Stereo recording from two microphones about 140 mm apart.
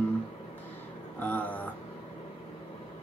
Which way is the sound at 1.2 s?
10° left (ahead or behind).